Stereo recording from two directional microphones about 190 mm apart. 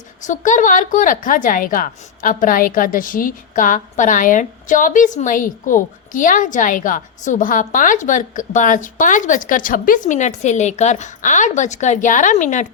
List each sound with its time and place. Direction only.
0.2 s a woman's voice: 40° left (ahead or behind)